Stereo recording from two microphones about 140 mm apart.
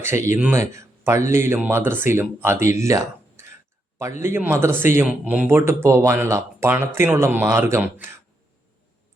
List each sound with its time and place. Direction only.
0.3 s speech: 15° right (ahead or behind)